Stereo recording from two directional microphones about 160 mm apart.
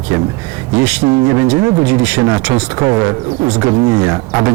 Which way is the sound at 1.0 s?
20° right (ahead or behind).